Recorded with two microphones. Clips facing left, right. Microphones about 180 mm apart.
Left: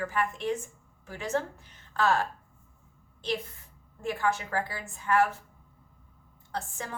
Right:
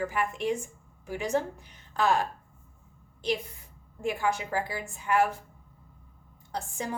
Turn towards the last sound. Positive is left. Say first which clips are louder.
# right 2 dB
turn(degrees=-15)  # may be behind; listen again after turning